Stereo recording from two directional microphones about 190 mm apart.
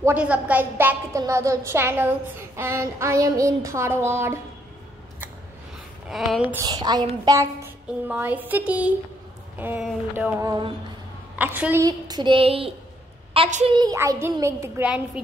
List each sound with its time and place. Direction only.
0.0 s a woman's voice: 5° right (ahead or behind)
6.0 s speech: centre (ahead or behind)
6.6 s a woman's voice: 20° right (ahead or behind)
13.7 s a woman's voice: 25° right (ahead or behind); by 15.2 s 5° right (ahead or behind)